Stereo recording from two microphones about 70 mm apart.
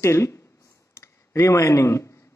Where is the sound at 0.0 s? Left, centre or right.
Left.